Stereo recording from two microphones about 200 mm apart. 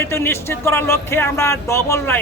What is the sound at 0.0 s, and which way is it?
Speech, 10° left (ahead or behind).